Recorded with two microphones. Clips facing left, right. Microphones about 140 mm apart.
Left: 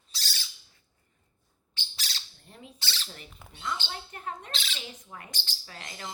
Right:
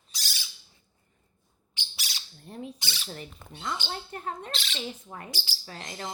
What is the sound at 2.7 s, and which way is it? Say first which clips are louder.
Squawk: right 1 dB; 15° right (ahead or behind).